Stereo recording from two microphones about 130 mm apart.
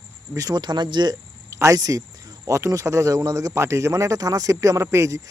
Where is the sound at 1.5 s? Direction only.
25° right (ahead or behind).